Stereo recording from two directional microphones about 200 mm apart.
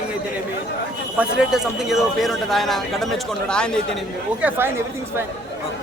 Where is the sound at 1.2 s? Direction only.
Centre (ahead or behind).